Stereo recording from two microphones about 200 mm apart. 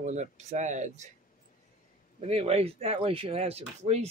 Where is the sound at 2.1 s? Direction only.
30° right (ahead or behind).